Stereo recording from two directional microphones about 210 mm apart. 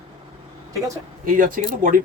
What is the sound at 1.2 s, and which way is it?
Speech, 40° right (ahead or behind).